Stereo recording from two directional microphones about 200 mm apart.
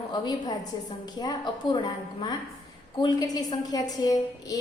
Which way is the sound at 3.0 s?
20° left (ahead or behind).